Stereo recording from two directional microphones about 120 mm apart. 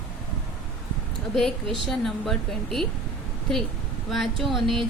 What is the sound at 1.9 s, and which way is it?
Speech, centre (ahead or behind).